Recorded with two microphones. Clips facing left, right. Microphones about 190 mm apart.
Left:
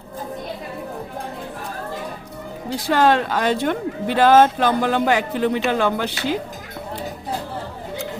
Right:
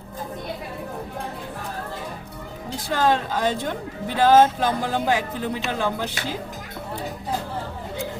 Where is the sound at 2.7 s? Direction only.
75° left (ahead or behind).